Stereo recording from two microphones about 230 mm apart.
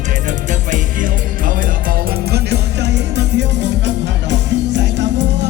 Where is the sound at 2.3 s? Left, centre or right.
Right.